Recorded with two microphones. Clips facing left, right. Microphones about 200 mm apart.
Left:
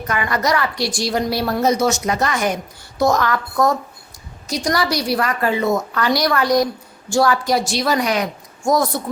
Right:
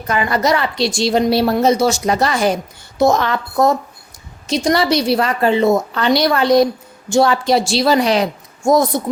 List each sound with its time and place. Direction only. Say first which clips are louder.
0.1 s a woman's voice: right 4 dB; 30° right (ahead or behind)